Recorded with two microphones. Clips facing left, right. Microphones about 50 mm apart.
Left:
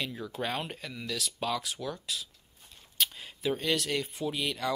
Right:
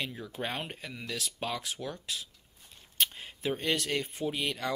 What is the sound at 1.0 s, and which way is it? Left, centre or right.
Speech, right.